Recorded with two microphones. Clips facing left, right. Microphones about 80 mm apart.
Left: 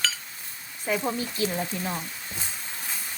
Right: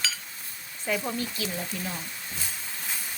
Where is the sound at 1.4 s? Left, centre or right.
Left.